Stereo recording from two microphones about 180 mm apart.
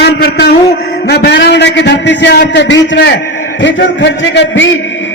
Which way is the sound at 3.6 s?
90° left.